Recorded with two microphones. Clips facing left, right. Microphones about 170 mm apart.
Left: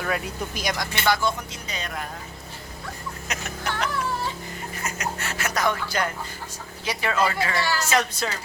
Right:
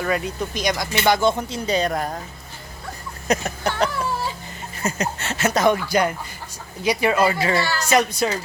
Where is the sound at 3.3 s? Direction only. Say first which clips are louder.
Right 9 dB; 35° right (ahead or behind); by 8.3 s 15° right (ahead or behind).